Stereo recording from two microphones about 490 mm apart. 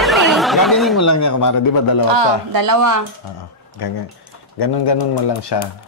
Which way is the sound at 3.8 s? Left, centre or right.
Left.